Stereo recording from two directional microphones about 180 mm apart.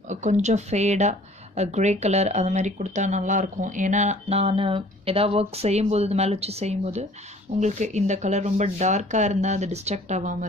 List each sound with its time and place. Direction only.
0.1 s speech: 40° right (ahead or behind)